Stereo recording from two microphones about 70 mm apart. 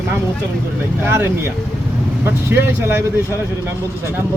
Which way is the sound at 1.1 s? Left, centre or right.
Right.